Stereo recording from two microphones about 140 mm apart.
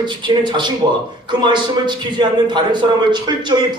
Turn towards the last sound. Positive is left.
turn(degrees=-35)  # may be behind; listen again after turning